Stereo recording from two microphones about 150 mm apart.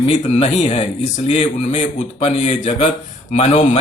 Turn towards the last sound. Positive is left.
turn(degrees=45)  # may be behind; listen again after turning